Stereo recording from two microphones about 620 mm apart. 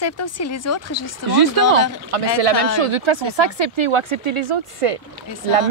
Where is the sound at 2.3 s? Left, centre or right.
Right.